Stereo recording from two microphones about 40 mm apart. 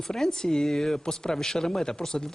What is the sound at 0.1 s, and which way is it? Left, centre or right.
Speech, centre.